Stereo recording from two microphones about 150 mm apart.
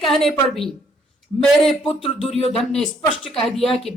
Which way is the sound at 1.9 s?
45° left (ahead or behind).